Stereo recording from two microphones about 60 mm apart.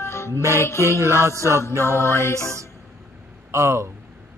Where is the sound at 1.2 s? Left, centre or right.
Right.